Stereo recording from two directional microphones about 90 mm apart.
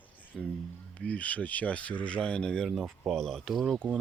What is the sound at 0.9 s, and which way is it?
Speech, 15° left (ahead or behind).